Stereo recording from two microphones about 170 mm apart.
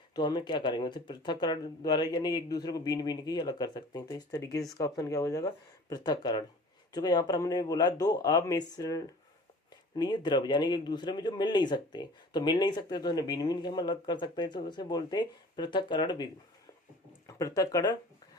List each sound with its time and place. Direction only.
0.1 s speech: 25° left (ahead or behind)